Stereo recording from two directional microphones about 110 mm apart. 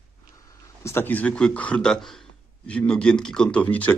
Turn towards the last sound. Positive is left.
turn(degrees=15)  # may be behind; listen again after turning